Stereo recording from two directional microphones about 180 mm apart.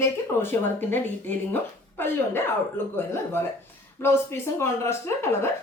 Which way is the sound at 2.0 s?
15° left (ahead or behind).